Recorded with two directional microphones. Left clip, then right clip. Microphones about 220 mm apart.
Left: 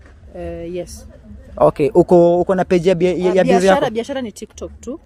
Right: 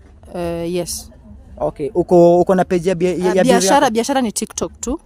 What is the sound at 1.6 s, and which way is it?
Speech, 35° left (ahead or behind).